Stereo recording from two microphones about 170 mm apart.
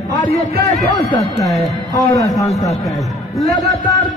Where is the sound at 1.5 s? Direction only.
Centre (ahead or behind).